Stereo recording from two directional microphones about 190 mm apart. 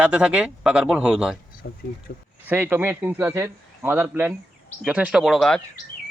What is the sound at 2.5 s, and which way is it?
Speech, 10° right (ahead or behind).